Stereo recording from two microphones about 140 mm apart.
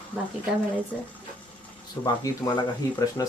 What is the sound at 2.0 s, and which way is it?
Speech, 25° left (ahead or behind).